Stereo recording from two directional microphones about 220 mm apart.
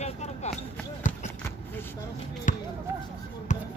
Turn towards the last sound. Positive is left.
turn(degrees=35)  # may be behind; listen again after turning